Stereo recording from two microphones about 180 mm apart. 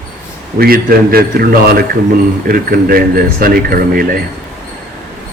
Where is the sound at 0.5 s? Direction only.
55° right (ahead or behind).